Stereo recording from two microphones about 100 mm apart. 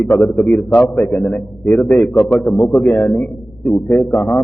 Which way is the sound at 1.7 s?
15° left (ahead or behind).